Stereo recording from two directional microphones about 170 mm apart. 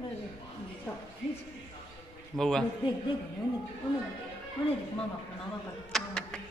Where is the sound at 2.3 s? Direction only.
Centre (ahead or behind).